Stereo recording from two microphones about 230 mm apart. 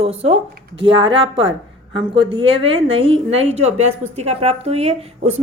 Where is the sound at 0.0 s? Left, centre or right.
Right.